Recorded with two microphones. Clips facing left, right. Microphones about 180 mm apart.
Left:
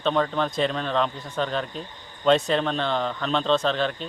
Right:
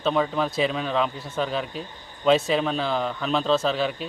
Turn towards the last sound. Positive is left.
turn(degrees=-5)  # may be behind; listen again after turning